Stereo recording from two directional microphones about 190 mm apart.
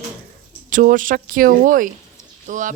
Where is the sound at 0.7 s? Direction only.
45° right (ahead or behind).